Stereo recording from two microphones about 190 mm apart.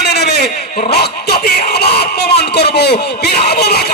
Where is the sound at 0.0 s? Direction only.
60° left (ahead or behind).